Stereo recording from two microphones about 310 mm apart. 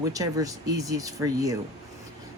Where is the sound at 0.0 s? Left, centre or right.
Centre.